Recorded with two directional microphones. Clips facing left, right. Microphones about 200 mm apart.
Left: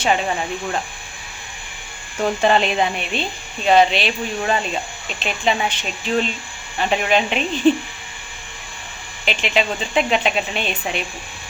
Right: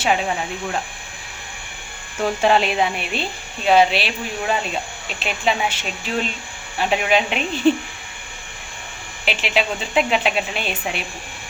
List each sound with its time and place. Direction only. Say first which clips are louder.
0.0 s a woman's voice: left 1 dB; 5° right (ahead or behind)
2.2 s a woman's voice: even; 5° right (ahead or behind)
9.2 s a woman's voice: left 1 dB; 5° right (ahead or behind)